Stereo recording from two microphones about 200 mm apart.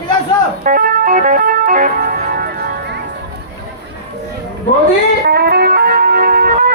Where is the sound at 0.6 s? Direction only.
45° right (ahead or behind).